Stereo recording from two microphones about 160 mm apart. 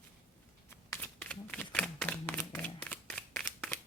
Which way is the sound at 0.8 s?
10° left (ahead or behind).